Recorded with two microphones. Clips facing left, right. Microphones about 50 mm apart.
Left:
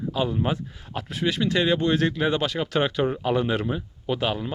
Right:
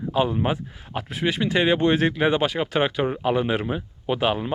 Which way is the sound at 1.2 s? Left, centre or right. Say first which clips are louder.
Right 2 dB; right.